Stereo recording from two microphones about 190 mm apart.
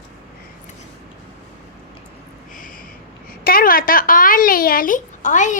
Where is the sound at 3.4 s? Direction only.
50° left (ahead or behind).